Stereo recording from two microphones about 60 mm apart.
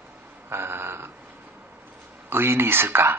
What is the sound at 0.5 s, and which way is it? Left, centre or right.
Speech, right.